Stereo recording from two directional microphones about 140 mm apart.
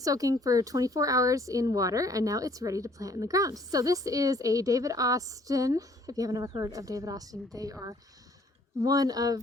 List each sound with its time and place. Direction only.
0.0 s speech: 25° right (ahead or behind)